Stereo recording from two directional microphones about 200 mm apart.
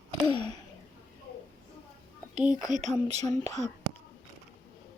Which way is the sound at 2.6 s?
40° right (ahead or behind).